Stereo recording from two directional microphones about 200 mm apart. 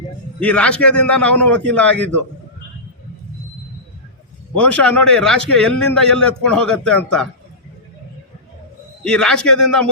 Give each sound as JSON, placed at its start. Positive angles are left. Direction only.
{"t": 0.3, "sound": "a man's voice", "side_deg": 5}
{"t": 4.5, "sound": "a man's voice", "side_deg": 5}
{"t": 9.0, "sound": "a man's voice", "side_deg": 5}